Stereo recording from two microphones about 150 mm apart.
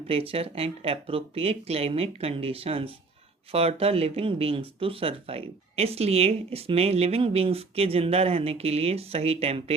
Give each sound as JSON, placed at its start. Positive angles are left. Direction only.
{"t": 0.1, "sound": "speech", "side_deg": -40}